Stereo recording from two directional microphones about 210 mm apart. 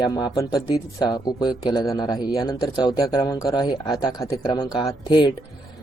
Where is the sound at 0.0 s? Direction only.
20° left (ahead or behind).